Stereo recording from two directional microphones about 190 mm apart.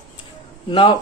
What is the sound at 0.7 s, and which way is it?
Speech, 25° left (ahead or behind).